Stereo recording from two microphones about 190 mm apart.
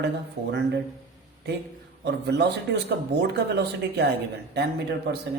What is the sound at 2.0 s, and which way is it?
Speech, 60° right (ahead or behind).